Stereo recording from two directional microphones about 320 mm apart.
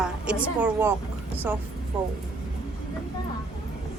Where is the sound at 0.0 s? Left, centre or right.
Centre.